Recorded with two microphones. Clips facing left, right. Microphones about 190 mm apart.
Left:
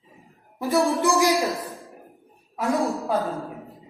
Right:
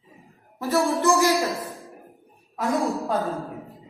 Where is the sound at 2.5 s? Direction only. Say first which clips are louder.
Even; centre (ahead or behind).